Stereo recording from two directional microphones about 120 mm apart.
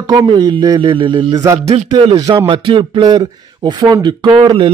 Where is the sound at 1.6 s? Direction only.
65° right (ahead or behind).